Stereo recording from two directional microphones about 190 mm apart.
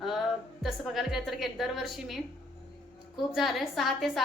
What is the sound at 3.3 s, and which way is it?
Speech, centre (ahead or behind).